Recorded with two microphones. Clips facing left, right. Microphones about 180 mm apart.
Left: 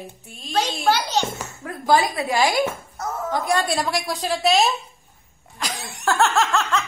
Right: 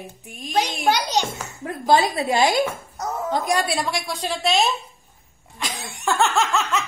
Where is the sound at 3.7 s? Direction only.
Centre (ahead or behind).